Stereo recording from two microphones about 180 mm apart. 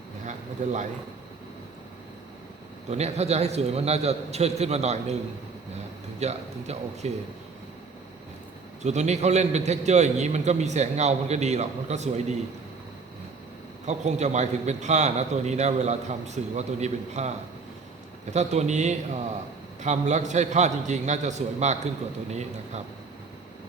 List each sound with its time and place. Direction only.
0.3 s a sound: 40° right (ahead or behind)
2.9 s a man's voice: 35° right (ahead or behind)
5.7 s a sound: 40° right (ahead or behind)
8.8 s a man's voice: 40° right (ahead or behind)
13.8 s a man's voice: 40° right (ahead or behind)
18.3 s a man's voice: 40° right (ahead or behind)